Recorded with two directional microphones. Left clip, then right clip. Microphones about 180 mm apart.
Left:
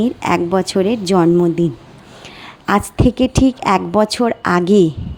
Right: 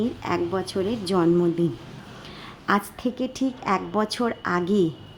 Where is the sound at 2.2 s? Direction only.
40° left (ahead or behind).